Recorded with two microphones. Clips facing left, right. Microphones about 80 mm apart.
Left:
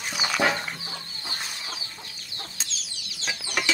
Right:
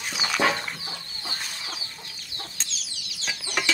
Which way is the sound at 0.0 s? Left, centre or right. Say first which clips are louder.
Even; centre.